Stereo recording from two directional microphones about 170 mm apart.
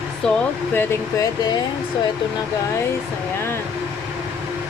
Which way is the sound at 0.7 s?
20° left (ahead or behind).